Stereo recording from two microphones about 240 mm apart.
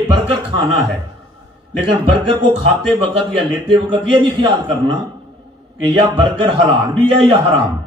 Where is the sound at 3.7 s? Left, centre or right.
Right.